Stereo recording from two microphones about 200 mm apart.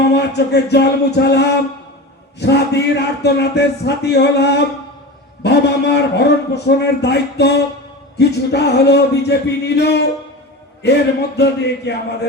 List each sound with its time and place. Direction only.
0.1 s a man's voice: 55° left (ahead or behind)
11.3 s a man's voice: 55° left (ahead or behind)